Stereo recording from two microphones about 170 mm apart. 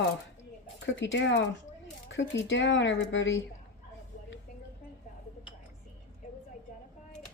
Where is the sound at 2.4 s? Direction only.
90° left.